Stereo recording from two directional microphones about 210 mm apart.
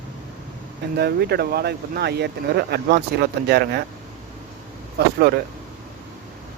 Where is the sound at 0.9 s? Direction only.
50° right (ahead or behind).